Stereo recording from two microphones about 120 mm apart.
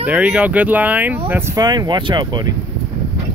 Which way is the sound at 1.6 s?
35° right (ahead or behind).